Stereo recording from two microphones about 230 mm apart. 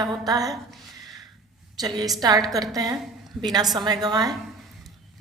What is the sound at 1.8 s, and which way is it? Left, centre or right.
A woman's voice, centre.